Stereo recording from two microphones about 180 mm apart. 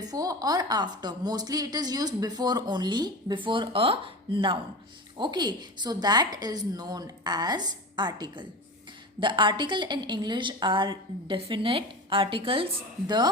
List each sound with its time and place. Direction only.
0.0 s a woman's voice: 20° right (ahead or behind)